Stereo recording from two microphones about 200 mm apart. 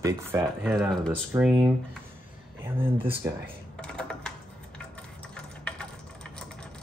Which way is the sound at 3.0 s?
10° right (ahead or behind).